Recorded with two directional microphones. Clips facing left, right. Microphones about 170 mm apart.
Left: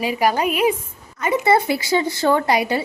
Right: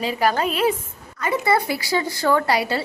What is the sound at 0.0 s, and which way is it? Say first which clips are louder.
Speech: left 2 dB; 10° left (ahead or behind).